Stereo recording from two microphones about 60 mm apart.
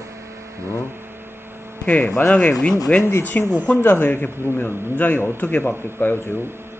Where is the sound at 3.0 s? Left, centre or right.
Left.